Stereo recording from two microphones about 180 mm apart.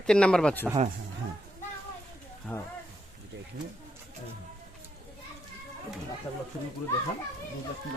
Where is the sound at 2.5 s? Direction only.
5° left (ahead or behind).